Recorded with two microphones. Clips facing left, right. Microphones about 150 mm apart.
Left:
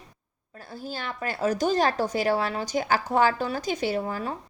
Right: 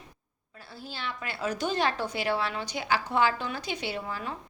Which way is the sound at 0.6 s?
45° left (ahead or behind).